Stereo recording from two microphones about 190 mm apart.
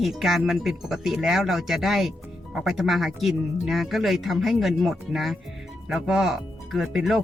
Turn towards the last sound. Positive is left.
turn(degrees=0)  # may be behind; listen again after turning